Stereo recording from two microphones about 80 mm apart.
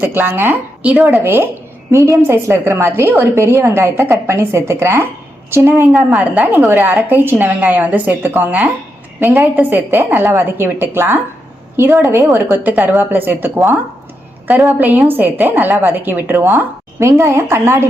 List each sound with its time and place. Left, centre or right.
0.0 s a woman's voice: right
1.1 s a woman's voice: right
1.9 s a woman's voice: right
6.1 s a woman's voice: centre
6.6 s a woman's voice: right
9.2 s a woman's voice: right
14.8 s a woman's voice: right